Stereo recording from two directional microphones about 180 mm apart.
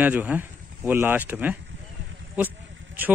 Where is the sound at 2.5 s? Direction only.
90° right.